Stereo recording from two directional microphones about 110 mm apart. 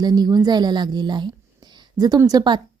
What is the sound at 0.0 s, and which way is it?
A woman's voice, 40° right (ahead or behind).